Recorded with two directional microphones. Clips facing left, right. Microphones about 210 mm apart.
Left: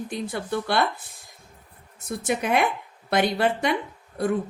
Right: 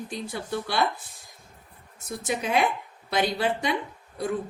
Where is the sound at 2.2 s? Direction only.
60° left (ahead or behind).